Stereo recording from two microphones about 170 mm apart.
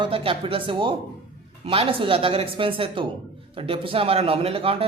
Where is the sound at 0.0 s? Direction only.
35° right (ahead or behind).